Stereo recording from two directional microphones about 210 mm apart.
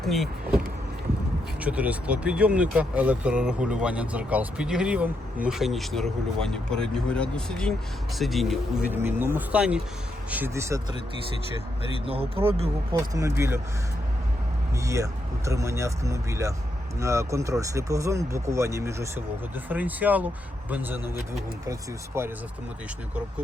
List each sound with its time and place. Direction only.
0.0 s speech: centre (ahead or behind)
1.6 s speech: 5° right (ahead or behind)
12.0 s speech: 25° right (ahead or behind)
13.1 s speech: 15° right (ahead or behind)
14.8 s speech: 15° right (ahead or behind)